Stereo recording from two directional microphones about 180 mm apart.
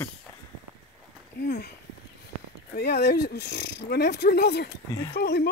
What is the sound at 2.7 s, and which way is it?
Speech, 60° left (ahead or behind).